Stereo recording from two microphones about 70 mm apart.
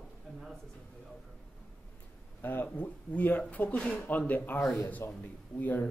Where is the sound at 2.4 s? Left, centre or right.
Left.